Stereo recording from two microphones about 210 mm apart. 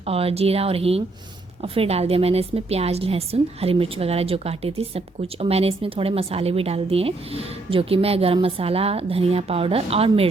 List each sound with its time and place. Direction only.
0.0 s a woman's voice: 25° right (ahead or behind)